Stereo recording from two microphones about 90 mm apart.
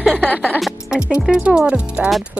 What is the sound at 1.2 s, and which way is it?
Speech, 10° right (ahead or behind).